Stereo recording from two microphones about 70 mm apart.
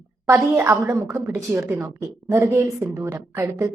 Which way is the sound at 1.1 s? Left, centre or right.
Right.